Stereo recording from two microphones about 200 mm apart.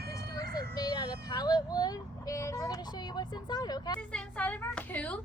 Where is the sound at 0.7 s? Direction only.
20° left (ahead or behind).